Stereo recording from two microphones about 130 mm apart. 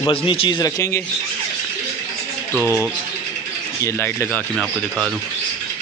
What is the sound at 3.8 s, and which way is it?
Speech, 20° left (ahead or behind).